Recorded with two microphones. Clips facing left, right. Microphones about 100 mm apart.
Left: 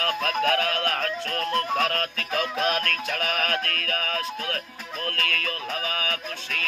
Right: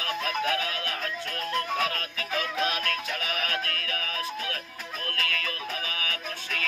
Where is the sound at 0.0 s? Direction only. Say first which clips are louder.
Left 4 dB; 55° left (ahead or behind).